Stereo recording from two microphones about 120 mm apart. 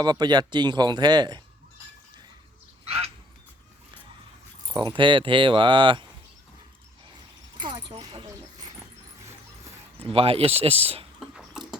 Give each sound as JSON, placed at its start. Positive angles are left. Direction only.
{"t": 0.0, "sound": "speech", "side_deg": -35}
{"t": 2.8, "sound": "a sound", "side_deg": -55}
{"t": 4.7, "sound": "speech", "side_deg": -40}
{"t": 7.6, "sound": "speech", "side_deg": -40}
{"t": 10.0, "sound": "speech", "side_deg": -50}
{"t": 11.2, "sound": "a sound", "side_deg": -5}